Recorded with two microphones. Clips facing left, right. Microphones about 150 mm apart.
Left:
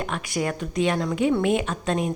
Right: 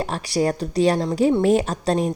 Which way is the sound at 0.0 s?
35° right (ahead or behind).